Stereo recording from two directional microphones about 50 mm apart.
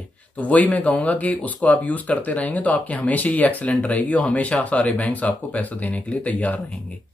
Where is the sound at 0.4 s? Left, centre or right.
Left.